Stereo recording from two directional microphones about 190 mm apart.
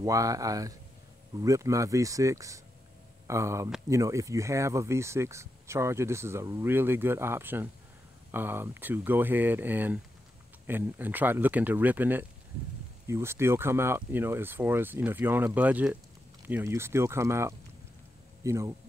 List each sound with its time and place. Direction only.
0.0 s speech: 20° right (ahead or behind)